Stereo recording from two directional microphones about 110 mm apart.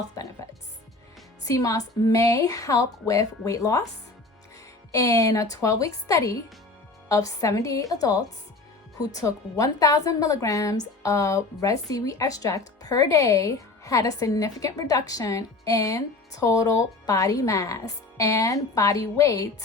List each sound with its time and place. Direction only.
1.5 s speech: 30° left (ahead or behind)
4.9 s speech: 30° left (ahead or behind)